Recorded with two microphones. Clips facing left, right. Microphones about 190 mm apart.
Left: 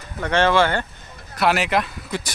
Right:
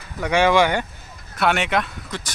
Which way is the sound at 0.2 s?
10° right (ahead or behind).